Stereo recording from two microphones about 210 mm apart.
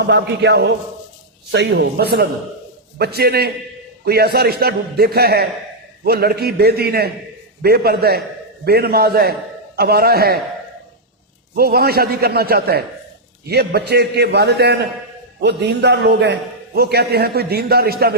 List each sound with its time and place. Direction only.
0.0 s a man's voice: 55° right (ahead or behind)
11.5 s a man's voice: 45° right (ahead or behind)